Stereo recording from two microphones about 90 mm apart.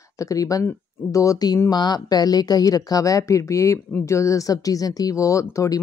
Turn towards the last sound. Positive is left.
turn(degrees=35)  # may be behind; listen again after turning